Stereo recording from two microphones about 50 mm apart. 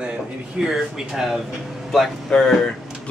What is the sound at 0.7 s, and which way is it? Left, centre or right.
Speech, centre.